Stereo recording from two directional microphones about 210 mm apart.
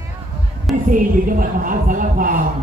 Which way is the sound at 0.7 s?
Centre (ahead or behind).